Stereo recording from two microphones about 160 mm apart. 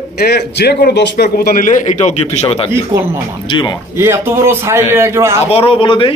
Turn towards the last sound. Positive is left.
turn(degrees=30)  # may be behind; listen again after turning